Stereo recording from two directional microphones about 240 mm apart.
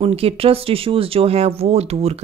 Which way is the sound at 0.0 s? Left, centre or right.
Right.